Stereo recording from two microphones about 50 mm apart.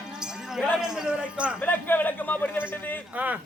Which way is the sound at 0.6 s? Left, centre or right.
Centre.